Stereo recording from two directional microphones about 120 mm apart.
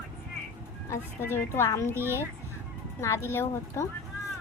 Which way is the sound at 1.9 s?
20° right (ahead or behind).